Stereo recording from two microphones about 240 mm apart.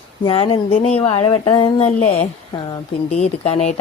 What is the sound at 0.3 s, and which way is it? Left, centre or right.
A woman's voice, left.